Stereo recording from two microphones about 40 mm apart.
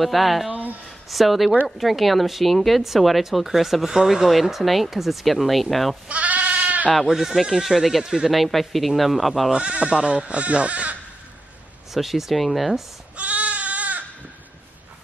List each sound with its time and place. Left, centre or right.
0.0 s speech: centre
6.0 s goat: right
7.1 s speech: centre
8.3 s speech: centre
9.5 s speech: right
11.9 s speech: centre
13.1 s goat: right